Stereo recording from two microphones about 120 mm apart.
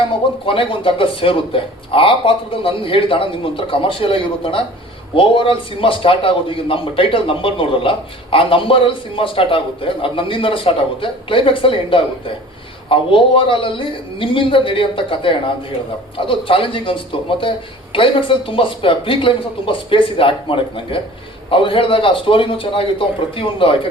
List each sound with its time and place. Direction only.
0.4 s a man's voice: 50° left (ahead or behind)